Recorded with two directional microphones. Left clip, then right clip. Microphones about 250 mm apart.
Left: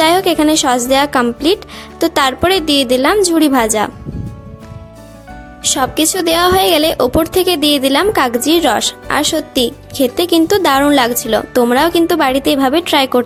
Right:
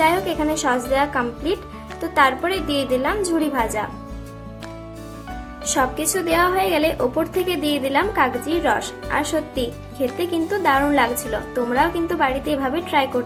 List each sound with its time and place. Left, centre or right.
0.0 s a woman's voice: left
5.7 s a woman's voice: left